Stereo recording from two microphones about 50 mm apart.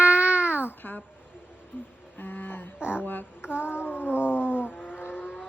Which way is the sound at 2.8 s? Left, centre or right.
Right.